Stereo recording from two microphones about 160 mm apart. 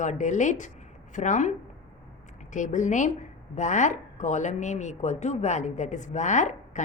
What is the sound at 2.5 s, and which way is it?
A woman's voice, 50° left (ahead or behind).